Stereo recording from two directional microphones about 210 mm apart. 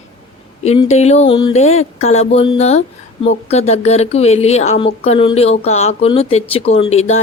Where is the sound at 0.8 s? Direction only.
30° left (ahead or behind).